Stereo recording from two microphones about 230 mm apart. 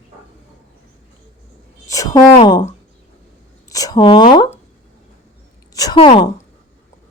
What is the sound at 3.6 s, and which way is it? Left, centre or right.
Speech, centre.